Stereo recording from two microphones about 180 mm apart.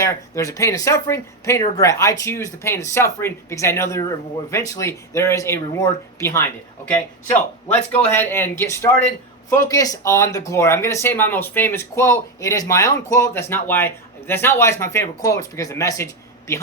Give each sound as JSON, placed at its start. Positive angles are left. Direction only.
{"t": 0.0, "sound": "speech", "side_deg": 15}